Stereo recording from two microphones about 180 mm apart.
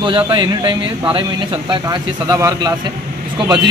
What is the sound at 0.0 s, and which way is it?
Speech, 25° right (ahead or behind).